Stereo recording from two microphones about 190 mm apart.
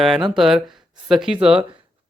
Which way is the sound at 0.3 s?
Centre (ahead or behind).